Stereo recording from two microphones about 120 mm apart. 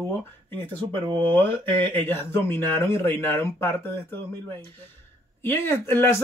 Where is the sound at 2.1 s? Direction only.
20° left (ahead or behind).